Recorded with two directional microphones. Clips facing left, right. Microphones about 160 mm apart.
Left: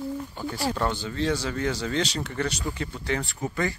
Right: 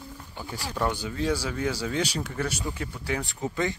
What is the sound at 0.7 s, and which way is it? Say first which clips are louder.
Speech: left 1 dB; 10° right (ahead or behind).